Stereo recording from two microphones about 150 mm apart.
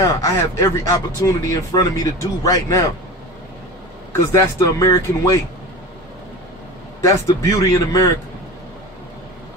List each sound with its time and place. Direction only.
0.0 s a man's voice: 20° left (ahead or behind)
4.1 s a man's voice: 20° left (ahead or behind)
7.0 s a man's voice: 20° left (ahead or behind)